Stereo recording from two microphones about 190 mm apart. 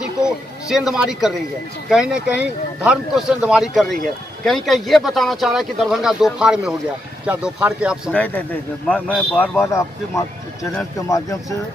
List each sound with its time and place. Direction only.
0.7 s a man's voice: 5° right (ahead or behind)
8.1 s a man's voice: 5° left (ahead or behind)
9.7 s speech: 15° left (ahead or behind)